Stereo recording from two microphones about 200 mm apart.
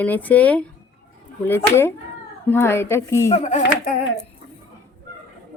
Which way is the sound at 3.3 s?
35° left (ahead or behind).